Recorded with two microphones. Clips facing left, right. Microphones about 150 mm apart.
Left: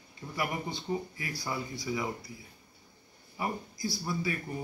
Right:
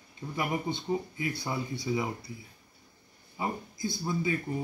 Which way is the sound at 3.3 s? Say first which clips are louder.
Right 1 dB; 20° right (ahead or behind).